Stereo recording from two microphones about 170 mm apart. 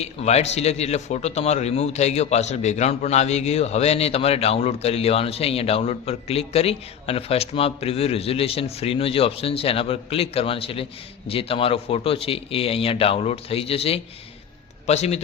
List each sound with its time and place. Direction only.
0.0 s a man's voice: 40° left (ahead or behind)